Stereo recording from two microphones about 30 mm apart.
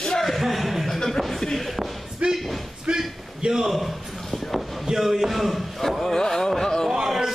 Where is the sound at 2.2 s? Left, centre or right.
Right.